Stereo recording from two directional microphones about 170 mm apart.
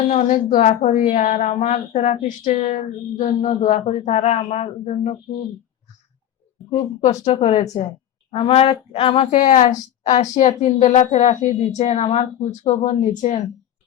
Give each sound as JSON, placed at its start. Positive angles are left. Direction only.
{"t": 0.1, "sound": "a woman's voice", "side_deg": 40}
{"t": 7.0, "sound": "a woman's voice", "side_deg": 40}
{"t": 9.3, "sound": "a woman's voice", "side_deg": 50}